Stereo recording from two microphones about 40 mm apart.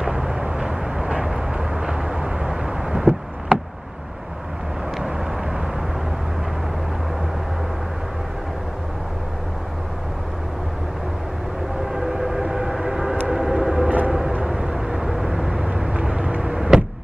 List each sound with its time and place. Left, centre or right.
0.1 s vehicle: centre
4.9 s vehicle: centre
11.9 s train: centre
13.3 s vehicle: centre
13.8 s vehicle: right
14.5 s vehicle: centre
15.9 s vehicle: right
16.4 s a sound: centre